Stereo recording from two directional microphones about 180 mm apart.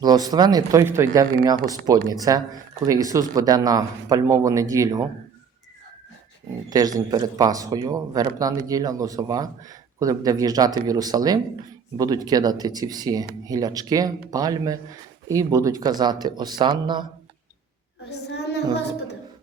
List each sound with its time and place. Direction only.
0.0 s a man's voice: 20° right (ahead or behind)
6.7 s a man's voice: 20° right (ahead or behind)